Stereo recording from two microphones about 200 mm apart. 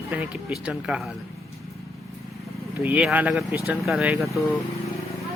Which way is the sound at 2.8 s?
5° right (ahead or behind).